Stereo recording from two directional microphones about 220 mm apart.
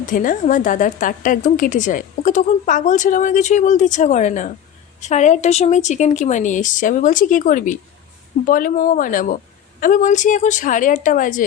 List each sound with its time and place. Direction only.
0.0 s a woman's voice: 35° left (ahead or behind)